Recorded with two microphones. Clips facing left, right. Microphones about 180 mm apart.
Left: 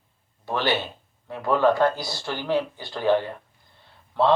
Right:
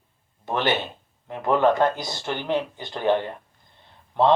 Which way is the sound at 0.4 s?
20° right (ahead or behind).